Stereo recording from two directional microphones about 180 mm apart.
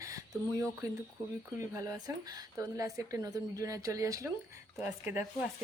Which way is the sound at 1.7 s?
20° right (ahead or behind).